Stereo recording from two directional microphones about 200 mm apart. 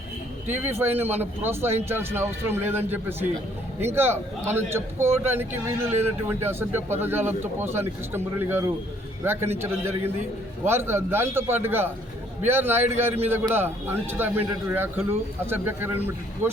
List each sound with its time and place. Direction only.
0.4 s speech: 10° right (ahead or behind)